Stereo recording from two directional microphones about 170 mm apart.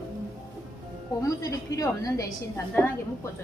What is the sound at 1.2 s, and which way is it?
A woman's voice, 20° left (ahead or behind).